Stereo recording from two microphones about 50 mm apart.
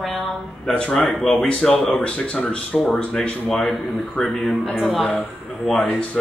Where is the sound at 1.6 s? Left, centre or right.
Centre.